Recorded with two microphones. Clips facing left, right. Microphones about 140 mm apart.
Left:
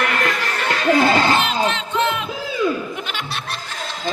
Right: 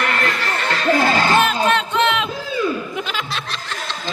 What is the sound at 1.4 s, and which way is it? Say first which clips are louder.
Crowd: right 3 dB; 50° right (ahead or behind).